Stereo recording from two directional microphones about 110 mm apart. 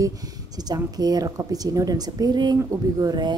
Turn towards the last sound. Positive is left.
turn(degrees=-35)  # may be behind; listen again after turning